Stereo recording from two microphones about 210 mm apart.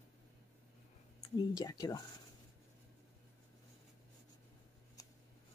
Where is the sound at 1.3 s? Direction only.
20° left (ahead or behind).